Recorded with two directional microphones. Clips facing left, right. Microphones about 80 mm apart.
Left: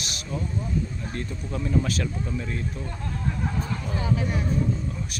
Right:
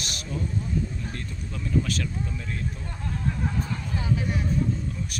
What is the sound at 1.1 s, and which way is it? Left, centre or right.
Speech, left.